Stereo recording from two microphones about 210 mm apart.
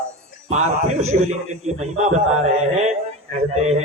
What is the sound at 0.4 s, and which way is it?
A man's voice, 30° right (ahead or behind).